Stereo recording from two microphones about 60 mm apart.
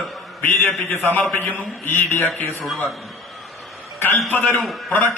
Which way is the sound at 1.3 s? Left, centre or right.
Left.